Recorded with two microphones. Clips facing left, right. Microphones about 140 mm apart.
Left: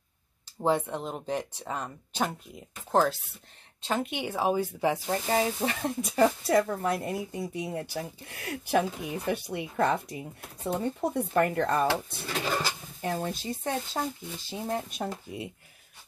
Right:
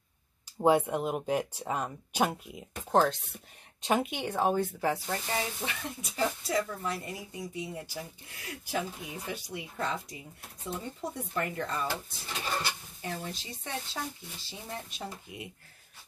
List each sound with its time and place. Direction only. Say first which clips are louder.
0.6 s speech: right 2 dB; 10° right (ahead or behind); by 5.4 s 20° left (ahead or behind)
5.4 s speech: left 8 dB; 40° left (ahead or behind); by 12.5 s 75° left (ahead or behind)
13.0 s speech: left 7 dB; 50° left (ahead or behind)
15.3 s speech: left 6 dB; 35° left (ahead or behind)